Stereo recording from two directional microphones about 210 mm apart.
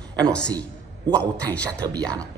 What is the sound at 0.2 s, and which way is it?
A man's voice, 5° left (ahead or behind).